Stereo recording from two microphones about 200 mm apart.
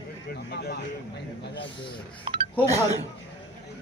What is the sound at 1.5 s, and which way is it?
Speech, 25° left (ahead or behind).